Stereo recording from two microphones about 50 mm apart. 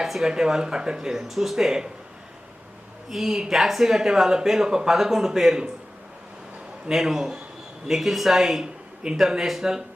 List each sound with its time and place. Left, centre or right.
0.0 s speech: centre
3.1 s speech: centre
6.9 s a woman's voice: centre